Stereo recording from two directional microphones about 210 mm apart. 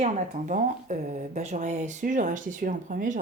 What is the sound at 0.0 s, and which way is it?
Speech, 35° right (ahead or behind).